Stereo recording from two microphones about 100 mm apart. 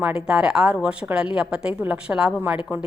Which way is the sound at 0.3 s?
10° right (ahead or behind).